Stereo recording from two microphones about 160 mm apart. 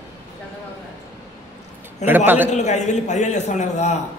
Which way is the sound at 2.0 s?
45° left (ahead or behind).